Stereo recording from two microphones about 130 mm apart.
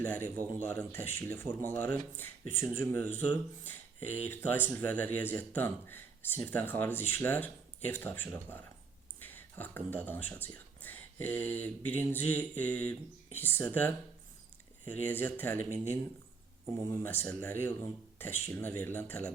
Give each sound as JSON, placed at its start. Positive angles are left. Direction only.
{"t": 0.0, "sound": "speech", "side_deg": 15}
{"t": 16.9, "sound": "speech", "side_deg": 15}